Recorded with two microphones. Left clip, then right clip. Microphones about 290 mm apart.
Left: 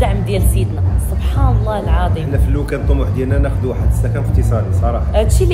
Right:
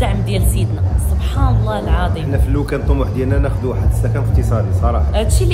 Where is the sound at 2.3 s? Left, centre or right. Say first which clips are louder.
Right 1 dB; centre.